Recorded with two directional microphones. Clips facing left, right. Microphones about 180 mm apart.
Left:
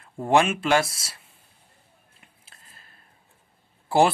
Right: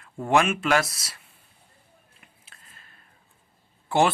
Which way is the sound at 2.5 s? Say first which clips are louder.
Left 1 dB; 35° left (ahead or behind).